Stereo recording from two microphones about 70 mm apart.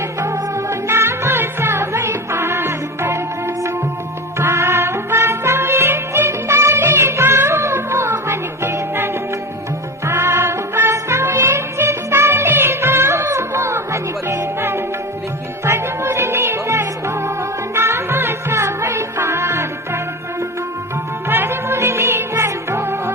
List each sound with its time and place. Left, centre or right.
0.2 s music: right
10.1 s music: right
21.2 s music: right